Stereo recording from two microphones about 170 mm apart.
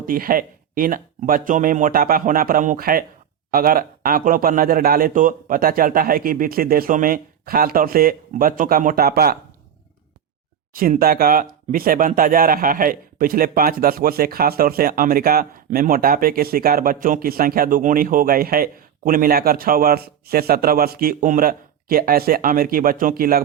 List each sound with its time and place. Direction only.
0.0 s speech: 55° right (ahead or behind)
10.8 s speech: 60° right (ahead or behind)